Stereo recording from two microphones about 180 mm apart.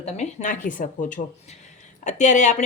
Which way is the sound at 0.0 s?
40° left (ahead or behind).